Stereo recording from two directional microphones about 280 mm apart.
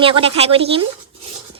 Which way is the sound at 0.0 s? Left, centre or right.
Centre.